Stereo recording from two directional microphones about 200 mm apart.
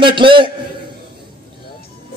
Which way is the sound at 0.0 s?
25° right (ahead or behind).